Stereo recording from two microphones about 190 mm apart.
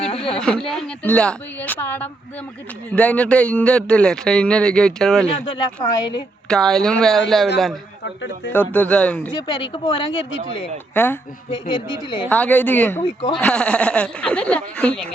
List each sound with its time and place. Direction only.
0.0 s a sound: 30° left (ahead or behind)
0.3 s speech: 5° left (ahead or behind)
5.5 s speech: 25° left (ahead or behind)
6.5 s speech: 5° left (ahead or behind)
8.0 s speech: 70° left (ahead or behind)
8.5 s speech: 10° left (ahead or behind)
9.3 s speech: 25° left (ahead or behind)
10.9 s speech: 10° left (ahead or behind)
11.7 s speech: 25° left (ahead or behind)
12.3 s speech: 10° left (ahead or behind)